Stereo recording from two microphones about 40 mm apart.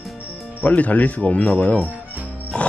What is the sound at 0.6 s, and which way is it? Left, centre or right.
Speech, left.